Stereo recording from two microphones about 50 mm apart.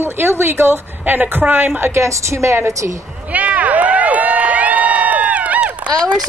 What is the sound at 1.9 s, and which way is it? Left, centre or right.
Speech, right.